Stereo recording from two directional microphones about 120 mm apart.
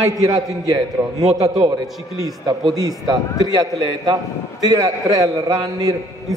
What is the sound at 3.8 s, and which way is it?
A man's voice, 35° right (ahead or behind).